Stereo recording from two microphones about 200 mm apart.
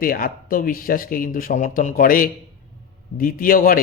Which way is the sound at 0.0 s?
45° left (ahead or behind).